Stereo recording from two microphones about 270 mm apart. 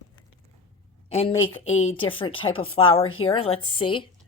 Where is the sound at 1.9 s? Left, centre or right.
Centre.